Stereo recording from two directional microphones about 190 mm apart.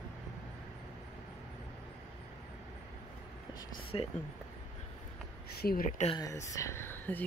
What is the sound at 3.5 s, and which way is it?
Speech, 30° left (ahead or behind).